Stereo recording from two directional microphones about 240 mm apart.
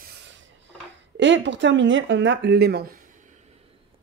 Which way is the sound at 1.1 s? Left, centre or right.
Right.